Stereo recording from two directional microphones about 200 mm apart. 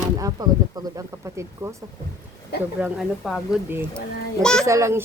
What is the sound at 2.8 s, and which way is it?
Speech, centre (ahead or behind).